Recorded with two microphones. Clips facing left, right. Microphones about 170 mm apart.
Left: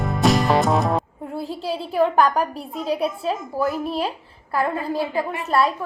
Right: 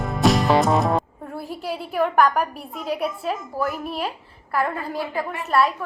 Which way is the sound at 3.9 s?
35° left (ahead or behind).